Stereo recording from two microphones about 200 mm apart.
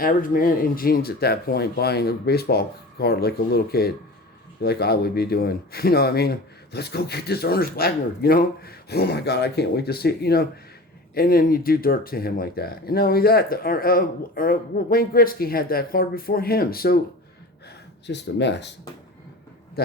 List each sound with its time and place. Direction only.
0.0 s speech: 45° left (ahead or behind)
18.0 s speech: 60° left (ahead or behind)